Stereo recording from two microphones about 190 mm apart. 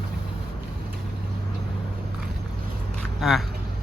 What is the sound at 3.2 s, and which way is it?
Speech, centre (ahead or behind).